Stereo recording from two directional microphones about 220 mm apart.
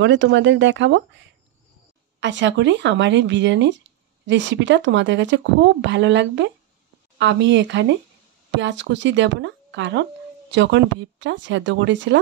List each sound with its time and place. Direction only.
0.0 s speech: 55° right (ahead or behind)
2.1 s speech: 55° right (ahead or behind)